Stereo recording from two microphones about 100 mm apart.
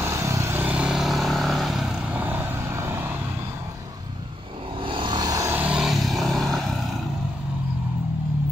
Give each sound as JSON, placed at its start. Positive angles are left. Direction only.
{"t": 0.0, "sound": "vehicle", "side_deg": -30}
{"t": 4.8, "sound": "vehicle", "side_deg": -55}
{"t": 5.3, "sound": "vehicle", "side_deg": -30}
{"t": 5.6, "sound": "vehicle", "side_deg": -10}